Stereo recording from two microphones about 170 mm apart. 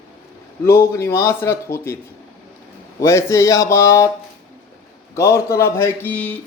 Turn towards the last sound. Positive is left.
turn(degrees=10)  # may be behind; listen again after turning